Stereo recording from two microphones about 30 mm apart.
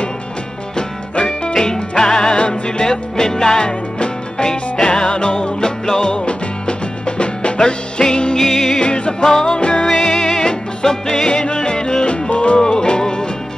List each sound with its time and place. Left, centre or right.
0.7 s music: left
2.9 s music: centre
3.6 s music: left
8.4 s music: centre
8.7 s music: left
9.2 s music: left
9.6 s music: left
9.8 s music: centre
11.2 s music: left
12.5 s music: left